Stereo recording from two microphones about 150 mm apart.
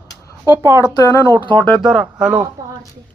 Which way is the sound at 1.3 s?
30° right (ahead or behind).